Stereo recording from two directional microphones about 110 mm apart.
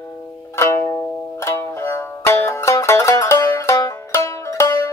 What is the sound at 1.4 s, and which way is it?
Music, 25° left (ahead or behind).